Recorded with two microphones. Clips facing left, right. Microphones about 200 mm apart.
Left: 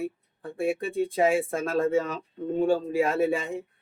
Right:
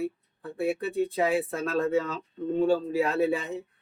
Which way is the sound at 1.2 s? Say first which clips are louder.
Left 6 dB; 45° left (ahead or behind).